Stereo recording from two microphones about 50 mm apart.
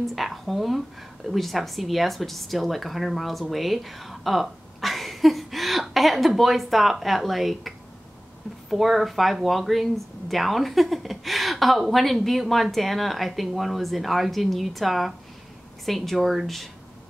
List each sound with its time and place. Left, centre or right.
0.0 s speech: centre